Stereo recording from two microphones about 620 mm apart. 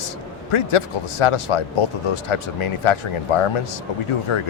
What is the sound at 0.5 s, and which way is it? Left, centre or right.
Speech, left.